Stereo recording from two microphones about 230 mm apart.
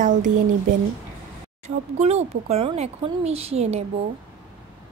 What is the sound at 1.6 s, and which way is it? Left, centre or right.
Speech, right.